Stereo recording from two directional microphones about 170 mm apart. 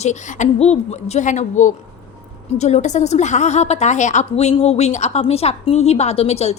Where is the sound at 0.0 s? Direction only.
45° left (ahead or behind).